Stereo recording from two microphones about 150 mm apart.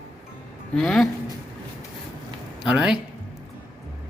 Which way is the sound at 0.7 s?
5° left (ahead or behind).